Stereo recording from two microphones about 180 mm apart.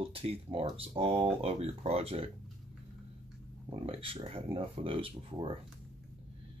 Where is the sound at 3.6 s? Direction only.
30° right (ahead or behind).